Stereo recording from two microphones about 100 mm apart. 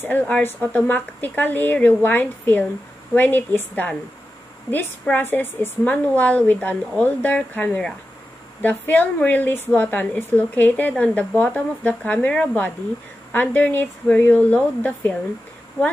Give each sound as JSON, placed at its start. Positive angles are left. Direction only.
{"t": 0.0, "sound": "speech", "side_deg": 15}
{"t": 5.1, "sound": "a woman's voice", "side_deg": 20}